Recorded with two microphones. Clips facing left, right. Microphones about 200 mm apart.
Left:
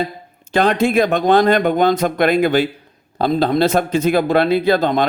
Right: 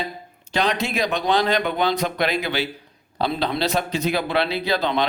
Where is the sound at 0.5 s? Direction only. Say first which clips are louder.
Left 8 dB; 50° left (ahead or behind).